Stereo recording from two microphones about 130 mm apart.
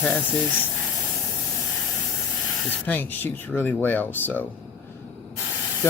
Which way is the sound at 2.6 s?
15° left (ahead or behind).